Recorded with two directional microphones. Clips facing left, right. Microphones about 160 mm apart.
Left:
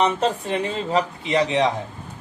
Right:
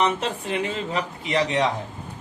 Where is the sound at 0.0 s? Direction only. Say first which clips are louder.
Left 3 dB; 35° left (ahead or behind).